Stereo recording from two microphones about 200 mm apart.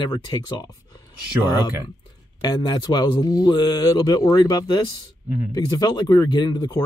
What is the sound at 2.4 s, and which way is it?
Speech, 20° left (ahead or behind).